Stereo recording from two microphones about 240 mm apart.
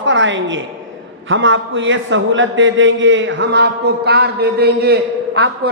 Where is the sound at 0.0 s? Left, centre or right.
Right.